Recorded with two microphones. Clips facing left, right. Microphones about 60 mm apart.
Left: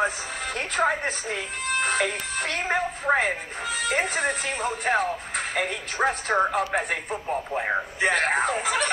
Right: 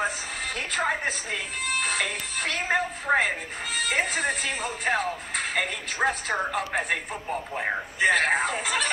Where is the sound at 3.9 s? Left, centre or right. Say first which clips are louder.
Left 1 dB; left.